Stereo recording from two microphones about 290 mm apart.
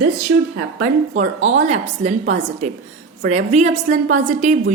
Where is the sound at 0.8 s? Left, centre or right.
Right.